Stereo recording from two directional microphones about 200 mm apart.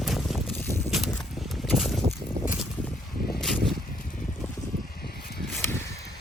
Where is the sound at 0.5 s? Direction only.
10° left (ahead or behind).